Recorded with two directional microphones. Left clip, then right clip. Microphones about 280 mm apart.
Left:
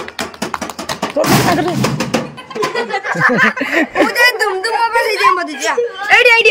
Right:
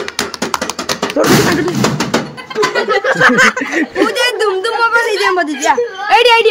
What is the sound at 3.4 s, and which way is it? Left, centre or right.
Speech, centre.